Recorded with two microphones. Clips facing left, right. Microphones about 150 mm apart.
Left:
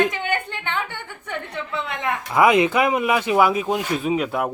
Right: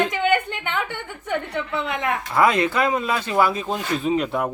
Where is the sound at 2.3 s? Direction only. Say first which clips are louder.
Left 3 dB; 15° left (ahead or behind).